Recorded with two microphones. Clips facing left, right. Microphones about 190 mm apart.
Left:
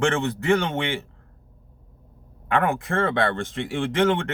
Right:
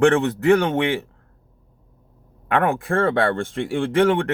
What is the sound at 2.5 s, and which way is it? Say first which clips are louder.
Speech: right 3 dB; 55° right (ahead or behind).